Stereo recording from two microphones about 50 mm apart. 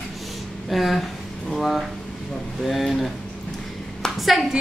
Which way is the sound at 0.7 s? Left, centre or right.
Centre.